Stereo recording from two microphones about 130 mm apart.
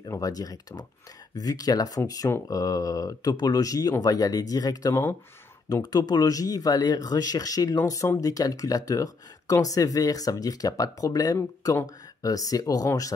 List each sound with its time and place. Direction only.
0.0 s speech: 30° left (ahead or behind)